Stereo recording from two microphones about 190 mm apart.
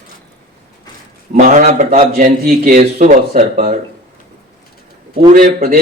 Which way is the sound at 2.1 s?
50° right (ahead or behind).